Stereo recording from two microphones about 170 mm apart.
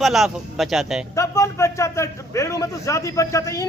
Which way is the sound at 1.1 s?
20° left (ahead or behind).